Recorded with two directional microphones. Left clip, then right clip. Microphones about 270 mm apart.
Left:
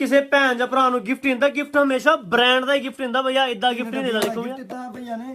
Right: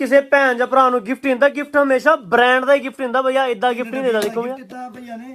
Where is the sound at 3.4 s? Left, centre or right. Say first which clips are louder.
Right 3 dB; centre.